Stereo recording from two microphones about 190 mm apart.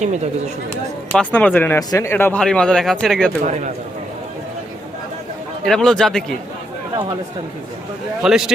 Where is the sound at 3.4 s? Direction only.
40° right (ahead or behind).